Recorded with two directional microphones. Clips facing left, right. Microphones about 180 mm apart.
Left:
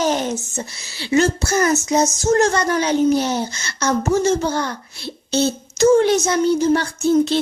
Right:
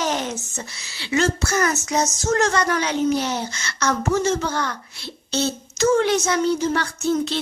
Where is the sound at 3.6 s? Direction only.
25° left (ahead or behind).